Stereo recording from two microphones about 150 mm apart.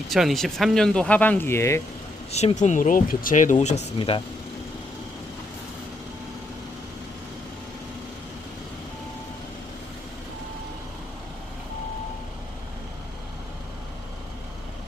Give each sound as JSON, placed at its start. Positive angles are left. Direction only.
{"t": 0.1, "sound": "speech", "side_deg": 0}
{"t": 2.3, "sound": "speech", "side_deg": 45}
{"t": 3.9, "sound": "speech", "side_deg": 35}